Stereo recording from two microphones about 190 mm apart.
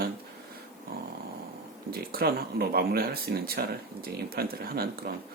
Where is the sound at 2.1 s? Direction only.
55° right (ahead or behind).